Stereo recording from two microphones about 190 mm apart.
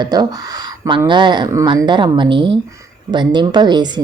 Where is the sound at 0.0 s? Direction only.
20° right (ahead or behind).